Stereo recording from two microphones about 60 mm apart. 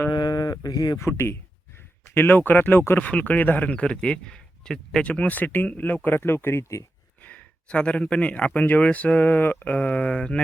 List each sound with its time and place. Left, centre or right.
0.3 s a sound: left
0.9 s speech: left
3.1 s speech: left
5.0 s speech: left
7.2 s speech: left
9.7 s speech: left